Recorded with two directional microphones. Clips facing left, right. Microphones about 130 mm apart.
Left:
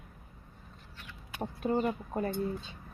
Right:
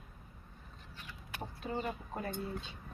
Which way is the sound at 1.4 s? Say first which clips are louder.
Left 9 dB; 50° left (ahead or behind).